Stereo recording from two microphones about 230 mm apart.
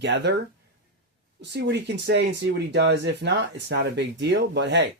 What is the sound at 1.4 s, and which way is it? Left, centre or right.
Speech, right.